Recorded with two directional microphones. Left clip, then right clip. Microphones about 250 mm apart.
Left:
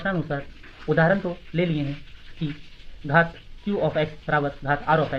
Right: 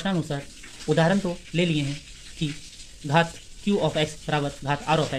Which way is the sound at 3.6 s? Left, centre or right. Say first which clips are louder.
Even; right.